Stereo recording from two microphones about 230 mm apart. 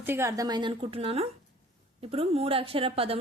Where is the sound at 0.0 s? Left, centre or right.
Centre.